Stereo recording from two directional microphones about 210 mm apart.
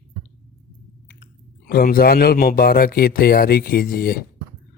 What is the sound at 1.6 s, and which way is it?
Speech, 45° left (ahead or behind).